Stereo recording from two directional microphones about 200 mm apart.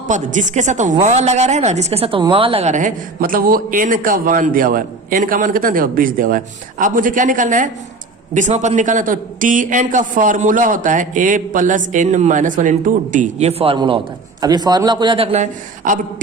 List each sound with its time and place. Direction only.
0.1 s a woman's voice: 35° right (ahead or behind)